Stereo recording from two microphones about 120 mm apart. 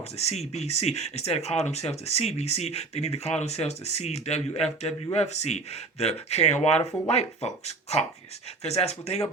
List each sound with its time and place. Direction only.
0.2 s speech: 65° left (ahead or behind)